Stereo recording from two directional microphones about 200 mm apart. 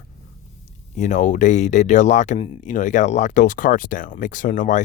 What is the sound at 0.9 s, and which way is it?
Speech, 35° left (ahead or behind).